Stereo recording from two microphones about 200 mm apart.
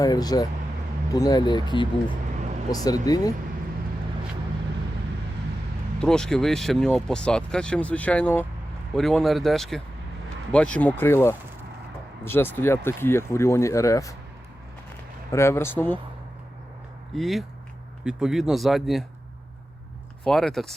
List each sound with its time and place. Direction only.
0.0 s speech: 20° left (ahead or behind)
6.0 s speech: 5° left (ahead or behind)
15.3 s speech: 15° left (ahead or behind)
17.2 s speech: centre (ahead or behind)
20.2 s speech: centre (ahead or behind)